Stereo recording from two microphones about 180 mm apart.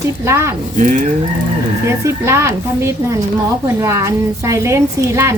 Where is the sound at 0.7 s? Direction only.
45° right (ahead or behind).